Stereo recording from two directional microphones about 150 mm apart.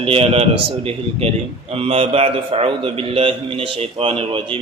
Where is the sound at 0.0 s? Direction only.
40° right (ahead or behind).